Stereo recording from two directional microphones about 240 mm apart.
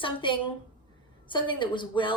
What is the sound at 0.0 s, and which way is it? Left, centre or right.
A woman's voice, left.